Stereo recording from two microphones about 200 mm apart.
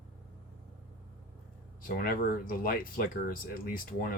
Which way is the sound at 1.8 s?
45° left (ahead or behind).